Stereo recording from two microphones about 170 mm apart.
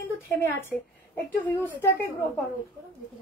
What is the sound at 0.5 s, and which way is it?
Speech, 10° left (ahead or behind).